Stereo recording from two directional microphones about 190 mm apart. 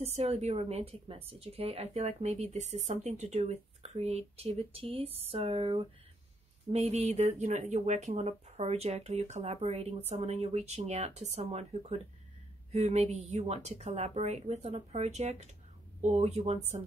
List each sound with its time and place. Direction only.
0.0 s speech: 35° right (ahead or behind)